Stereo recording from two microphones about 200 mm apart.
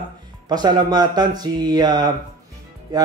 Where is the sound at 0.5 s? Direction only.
20° right (ahead or behind).